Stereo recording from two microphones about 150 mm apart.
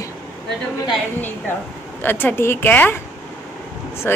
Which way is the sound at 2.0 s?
15° left (ahead or behind).